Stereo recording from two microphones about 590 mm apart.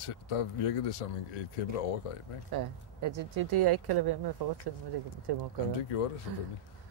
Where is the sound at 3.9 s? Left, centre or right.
Right.